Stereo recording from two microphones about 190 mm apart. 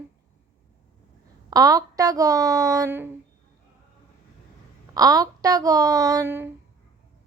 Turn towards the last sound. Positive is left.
turn(degrees=-10)  # may be behind; listen again after turning